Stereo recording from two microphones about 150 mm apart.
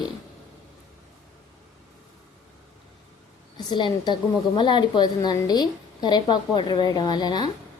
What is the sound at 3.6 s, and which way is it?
A woman's voice, 30° left (ahead or behind).